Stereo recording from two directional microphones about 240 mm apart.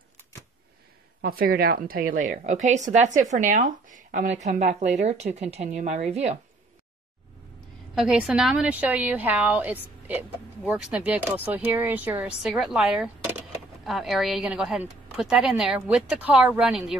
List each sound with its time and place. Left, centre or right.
1.2 s a woman's voice: right
7.9 s a woman's voice: centre